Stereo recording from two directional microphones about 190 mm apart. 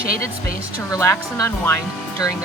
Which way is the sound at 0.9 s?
15° left (ahead or behind).